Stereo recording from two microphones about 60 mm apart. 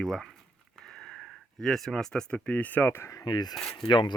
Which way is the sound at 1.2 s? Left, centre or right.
Centre.